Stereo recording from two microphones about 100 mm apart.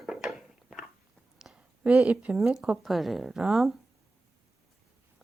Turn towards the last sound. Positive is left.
turn(degrees=0)  # may be behind; listen again after turning